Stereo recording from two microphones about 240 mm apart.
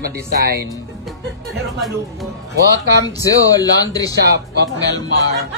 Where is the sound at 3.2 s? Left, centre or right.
Centre.